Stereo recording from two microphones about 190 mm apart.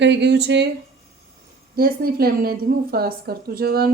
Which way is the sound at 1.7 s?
55° right (ahead or behind).